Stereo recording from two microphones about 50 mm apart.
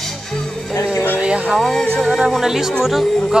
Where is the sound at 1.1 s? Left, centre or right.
Right.